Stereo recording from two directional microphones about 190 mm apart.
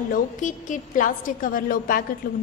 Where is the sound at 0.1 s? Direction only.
40° left (ahead or behind).